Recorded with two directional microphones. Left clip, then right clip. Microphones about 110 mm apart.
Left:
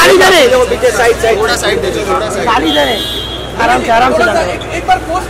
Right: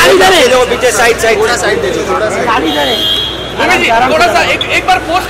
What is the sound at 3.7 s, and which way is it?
Speech, 55° left (ahead or behind).